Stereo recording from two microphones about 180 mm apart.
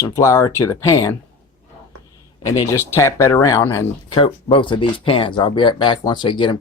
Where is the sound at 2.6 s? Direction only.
15° left (ahead or behind).